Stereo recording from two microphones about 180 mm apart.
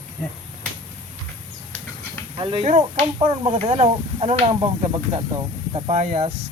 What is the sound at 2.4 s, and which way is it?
Speech, 30° right (ahead or behind).